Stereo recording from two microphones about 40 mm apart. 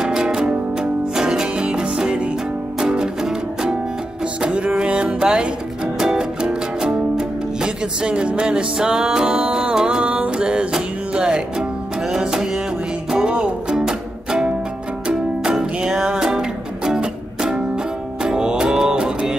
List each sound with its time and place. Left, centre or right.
0.0 s music: centre
4.4 s music: right
15.6 s music: centre